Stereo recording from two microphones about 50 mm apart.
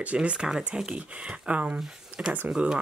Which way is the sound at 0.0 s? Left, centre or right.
Right.